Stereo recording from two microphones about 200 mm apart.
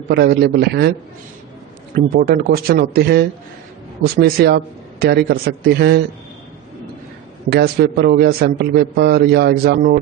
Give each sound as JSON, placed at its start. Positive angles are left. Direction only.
{"t": 0.1, "sound": "a man's voice", "side_deg": -55}
{"t": 2.1, "sound": "a man's voice", "side_deg": -50}
{"t": 7.5, "sound": "a man's voice", "side_deg": -50}